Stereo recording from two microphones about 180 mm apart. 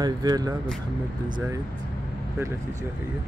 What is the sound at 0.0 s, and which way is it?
Speech, 20° right (ahead or behind).